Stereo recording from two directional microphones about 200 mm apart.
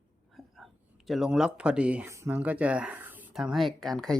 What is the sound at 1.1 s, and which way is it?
A woman's voice, centre (ahead or behind).